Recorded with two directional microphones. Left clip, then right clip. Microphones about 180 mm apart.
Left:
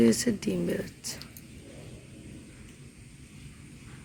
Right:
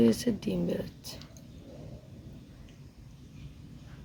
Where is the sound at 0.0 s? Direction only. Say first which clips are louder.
Left 2 dB; 10° left (ahead or behind).